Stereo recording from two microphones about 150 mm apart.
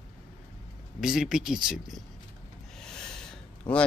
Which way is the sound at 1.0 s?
5° right (ahead or behind).